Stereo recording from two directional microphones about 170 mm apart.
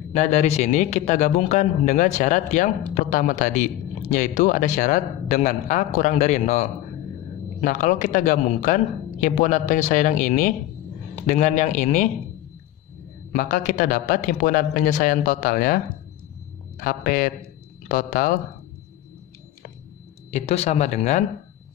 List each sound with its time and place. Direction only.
0.1 s speech: 40° left (ahead or behind)
13.3 s a man's voice: 50° left (ahead or behind)
20.2 s speech: 40° left (ahead or behind)